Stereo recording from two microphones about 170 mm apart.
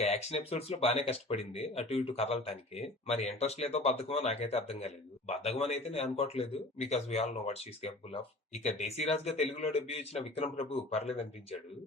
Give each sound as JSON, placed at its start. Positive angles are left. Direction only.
{"t": 0.0, "sound": "speech", "side_deg": 40}